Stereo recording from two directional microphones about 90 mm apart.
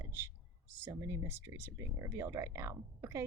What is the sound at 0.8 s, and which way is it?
Speech, 25° right (ahead or behind).